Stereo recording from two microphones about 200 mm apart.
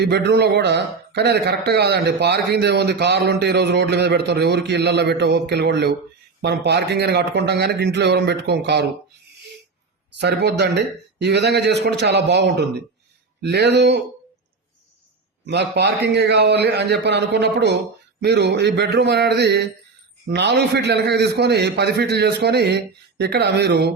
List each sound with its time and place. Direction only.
0.0 s a man's voice: 55° right (ahead or behind)
10.2 s a man's voice: 60° right (ahead or behind)
15.4 s a man's voice: 60° right (ahead or behind)